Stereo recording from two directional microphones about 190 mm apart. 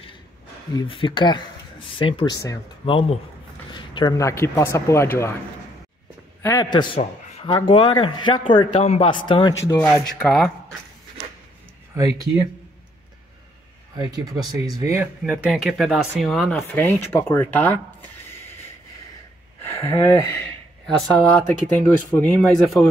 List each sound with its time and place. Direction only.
0.7 s a man's voice: 30° left (ahead or behind)
6.4 s a man's voice: 20° left (ahead or behind)
9.7 s speech: 10° left (ahead or behind)
13.9 s speech: 20° right (ahead or behind); by 17.7 s 10° left (ahead or behind)
19.6 s speech: 10° left (ahead or behind)